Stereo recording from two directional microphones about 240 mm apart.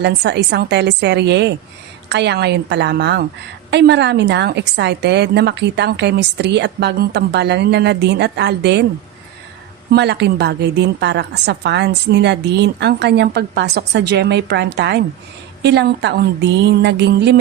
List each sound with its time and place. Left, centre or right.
0.0 s a woman's voice: right
9.9 s a woman's voice: right